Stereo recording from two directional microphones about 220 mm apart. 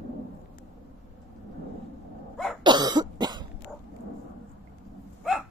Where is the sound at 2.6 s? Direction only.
20° right (ahead or behind).